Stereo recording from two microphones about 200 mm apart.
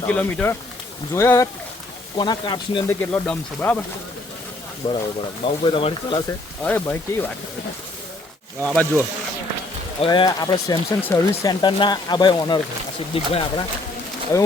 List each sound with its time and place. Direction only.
0.0 s speech: 5° left (ahead or behind); by 2.8 s 25° left (ahead or behind)
3.0 s speech: 10° left (ahead or behind)
4.8 s speech: 30° left (ahead or behind)
6.6 s speech: 10° left (ahead or behind)
8.6 s speech: 5° left (ahead or behind)
10.0 s speech: 25° left (ahead or behind)